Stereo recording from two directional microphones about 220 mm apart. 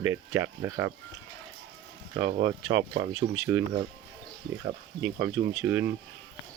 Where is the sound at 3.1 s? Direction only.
10° right (ahead or behind).